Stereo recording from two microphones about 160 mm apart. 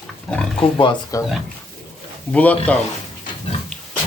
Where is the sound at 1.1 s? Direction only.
20° left (ahead or behind).